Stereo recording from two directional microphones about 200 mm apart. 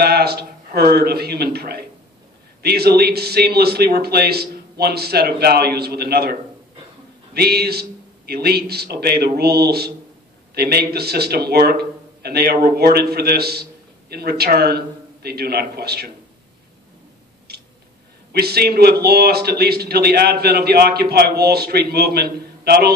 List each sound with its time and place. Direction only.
0.0 s a man's voice: 50° right (ahead or behind)
7.3 s a man's voice: 50° right (ahead or behind)
18.3 s a man's voice: 50° right (ahead or behind)